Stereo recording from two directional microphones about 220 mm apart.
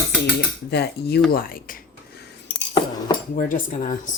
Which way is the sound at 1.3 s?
40° left (ahead or behind).